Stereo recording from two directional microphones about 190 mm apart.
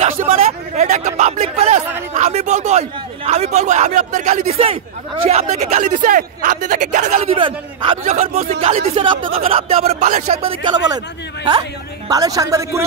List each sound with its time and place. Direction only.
0.4 s a man's voice: 35° right (ahead or behind)
7.3 s a man's voice: 25° right (ahead or behind)
12.1 s speech: 20° right (ahead or behind)